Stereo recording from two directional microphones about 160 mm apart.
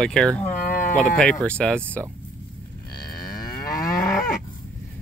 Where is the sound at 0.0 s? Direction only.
5° left (ahead or behind).